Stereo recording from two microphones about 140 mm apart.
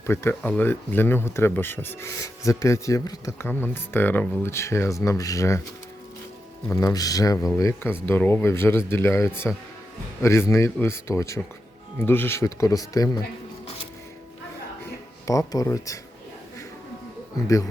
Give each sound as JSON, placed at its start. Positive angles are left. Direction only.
{"t": 0.0, "sound": "speech", "side_deg": 15}
{"t": 3.4, "sound": "speech", "side_deg": 15}
{"t": 6.7, "sound": "speech", "side_deg": 20}
{"t": 15.3, "sound": "speech", "side_deg": 25}